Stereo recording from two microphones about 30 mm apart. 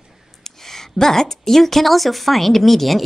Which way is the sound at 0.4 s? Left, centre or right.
Centre.